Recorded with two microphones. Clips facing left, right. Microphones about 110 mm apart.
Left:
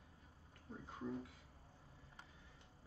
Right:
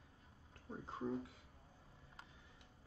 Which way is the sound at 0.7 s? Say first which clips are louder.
Right 4 dB; 30° right (ahead or behind).